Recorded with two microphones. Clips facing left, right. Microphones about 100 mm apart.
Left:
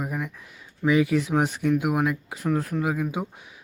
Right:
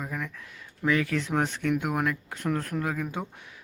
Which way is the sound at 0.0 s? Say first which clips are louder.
Left 4 dB; 15° left (ahead or behind).